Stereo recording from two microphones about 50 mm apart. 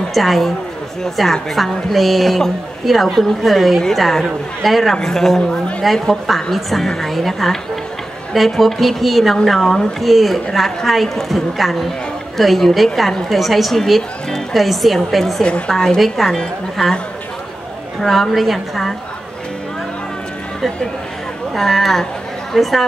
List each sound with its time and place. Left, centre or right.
0.1 s a woman's voice: centre
15.4 s a woman's voice: left
15.7 s a woman's voice: centre
18.0 s a woman's voice: centre
21.5 s a woman's voice: centre